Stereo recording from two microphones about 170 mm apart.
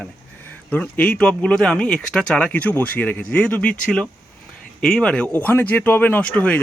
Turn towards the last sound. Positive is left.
turn(degrees=10)  # may be behind; listen again after turning